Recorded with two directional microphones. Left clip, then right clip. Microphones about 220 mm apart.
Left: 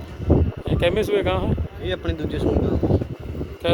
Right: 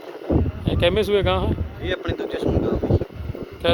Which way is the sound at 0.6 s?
Centre (ahead or behind).